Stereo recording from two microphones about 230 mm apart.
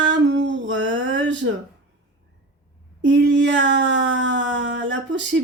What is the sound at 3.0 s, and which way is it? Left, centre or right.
Speech, right.